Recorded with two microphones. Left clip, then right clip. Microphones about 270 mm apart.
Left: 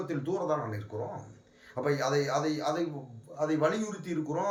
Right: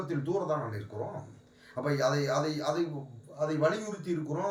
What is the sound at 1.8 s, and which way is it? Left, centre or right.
A man's voice, centre.